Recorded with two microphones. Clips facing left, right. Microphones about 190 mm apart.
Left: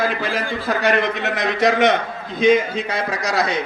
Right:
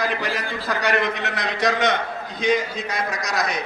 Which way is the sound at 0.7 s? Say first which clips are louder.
Left 4 dB; 20° left (ahead or behind).